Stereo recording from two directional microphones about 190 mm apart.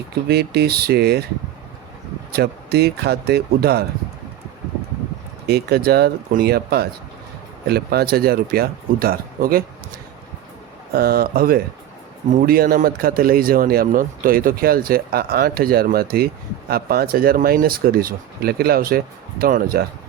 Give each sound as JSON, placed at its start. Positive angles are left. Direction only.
{"t": 0.3, "sound": "speech", "side_deg": -55}
{"t": 2.3, "sound": "speech", "side_deg": -55}
{"t": 5.5, "sound": "a man's voice", "side_deg": -60}
{"t": 10.9, "sound": "a man's voice", "side_deg": -55}